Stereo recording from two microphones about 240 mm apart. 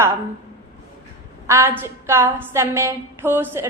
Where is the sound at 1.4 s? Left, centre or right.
Centre.